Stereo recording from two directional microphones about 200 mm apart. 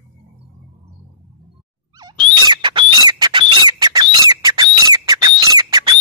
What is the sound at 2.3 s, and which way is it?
Squawk, 20° right (ahead or behind).